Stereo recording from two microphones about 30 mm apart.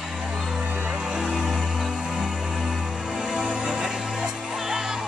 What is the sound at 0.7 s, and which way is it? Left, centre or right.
Music, right.